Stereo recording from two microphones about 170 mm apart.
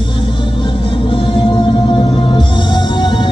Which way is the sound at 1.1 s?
30° left (ahead or behind).